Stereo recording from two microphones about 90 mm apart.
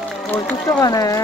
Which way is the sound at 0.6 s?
40° left (ahead or behind).